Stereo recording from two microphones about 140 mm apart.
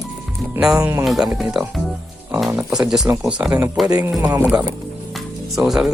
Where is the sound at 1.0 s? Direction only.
Centre (ahead or behind).